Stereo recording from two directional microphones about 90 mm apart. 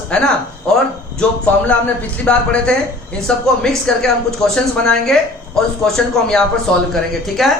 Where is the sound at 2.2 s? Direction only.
10° left (ahead or behind).